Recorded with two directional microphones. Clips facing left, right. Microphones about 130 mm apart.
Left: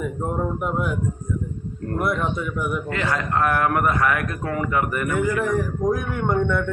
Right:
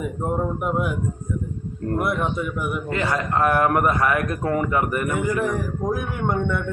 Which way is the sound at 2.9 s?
25° right (ahead or behind).